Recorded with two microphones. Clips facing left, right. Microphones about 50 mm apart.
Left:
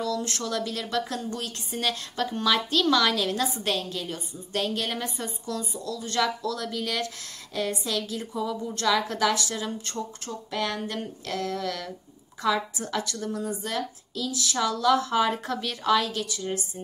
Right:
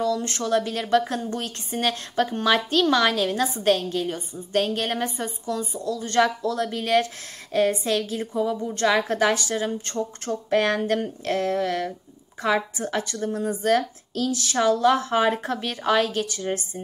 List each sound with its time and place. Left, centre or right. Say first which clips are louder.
0.5 s a woman's voice: right 11 dB; right
8.3 s a woman's voice: right 5 dB; right
11.2 s a woman's voice: right 6 dB; right
14.6 s a woman's voice: right 4 dB; right